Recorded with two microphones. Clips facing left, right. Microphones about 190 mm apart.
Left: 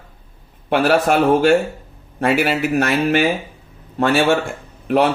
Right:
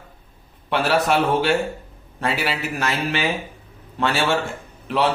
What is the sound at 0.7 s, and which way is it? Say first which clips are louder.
Speech: left 4 dB; 50° left (ahead or behind).